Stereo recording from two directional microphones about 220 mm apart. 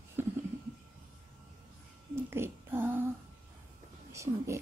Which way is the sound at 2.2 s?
10° right (ahead or behind).